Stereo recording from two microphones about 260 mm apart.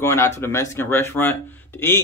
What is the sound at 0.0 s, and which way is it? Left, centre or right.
Speech, centre.